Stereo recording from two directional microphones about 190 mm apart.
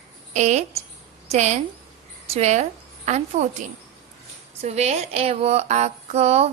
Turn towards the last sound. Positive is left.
turn(degrees=-35)  # may be behind; listen again after turning